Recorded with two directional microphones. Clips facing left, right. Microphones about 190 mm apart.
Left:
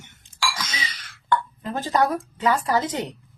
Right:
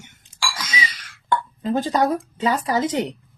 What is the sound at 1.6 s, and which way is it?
Speech, 20° right (ahead or behind).